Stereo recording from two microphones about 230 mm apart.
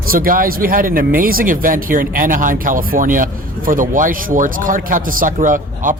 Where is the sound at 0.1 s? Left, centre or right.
Right.